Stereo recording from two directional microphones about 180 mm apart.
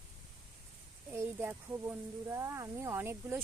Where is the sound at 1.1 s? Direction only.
10° right (ahead or behind).